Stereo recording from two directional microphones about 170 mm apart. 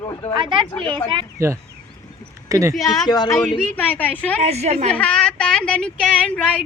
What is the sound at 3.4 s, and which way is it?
A man's voice, centre (ahead or behind).